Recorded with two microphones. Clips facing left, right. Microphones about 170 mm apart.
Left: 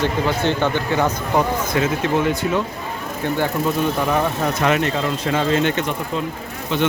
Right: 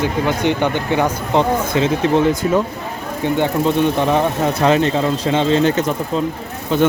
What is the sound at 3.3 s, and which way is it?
Speech, 20° right (ahead or behind).